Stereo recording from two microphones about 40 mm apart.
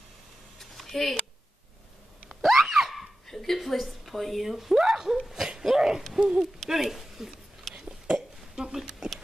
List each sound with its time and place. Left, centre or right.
0.6 s a sound: centre
2.4 s screaming: centre
3.3 s dog: centre
3.5 s speech: centre
6.7 s speech: centre
7.7 s a sound: right